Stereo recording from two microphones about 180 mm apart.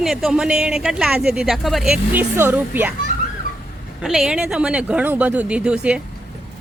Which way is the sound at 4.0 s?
5° right (ahead or behind).